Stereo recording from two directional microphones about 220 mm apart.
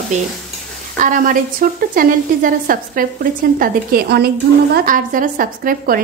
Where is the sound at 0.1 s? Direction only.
30° right (ahead or behind).